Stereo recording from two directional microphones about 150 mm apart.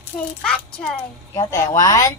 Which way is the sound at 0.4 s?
5° left (ahead or behind).